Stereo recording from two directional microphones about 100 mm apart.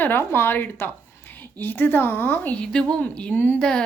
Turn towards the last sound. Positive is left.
turn(degrees=15)  # may be behind; listen again after turning